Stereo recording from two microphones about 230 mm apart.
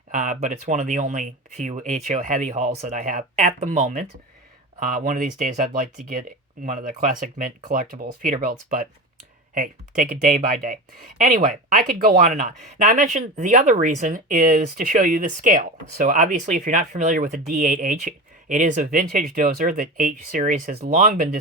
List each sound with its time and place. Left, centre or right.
0.1 s speech: right